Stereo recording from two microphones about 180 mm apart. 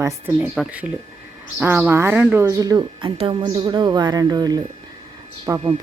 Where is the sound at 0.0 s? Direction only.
10° right (ahead or behind).